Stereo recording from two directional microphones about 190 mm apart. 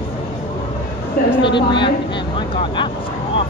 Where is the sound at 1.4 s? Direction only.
25° left (ahead or behind).